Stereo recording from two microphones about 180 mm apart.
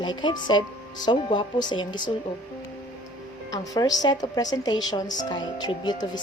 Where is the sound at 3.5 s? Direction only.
20° left (ahead or behind).